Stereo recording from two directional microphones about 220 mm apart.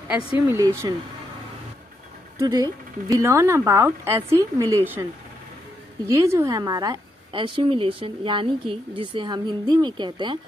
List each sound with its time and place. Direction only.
0.6 s speech: 15° right (ahead or behind)
2.4 s speech: 15° right (ahead or behind)
6.0 s a woman's voice: 15° right (ahead or behind)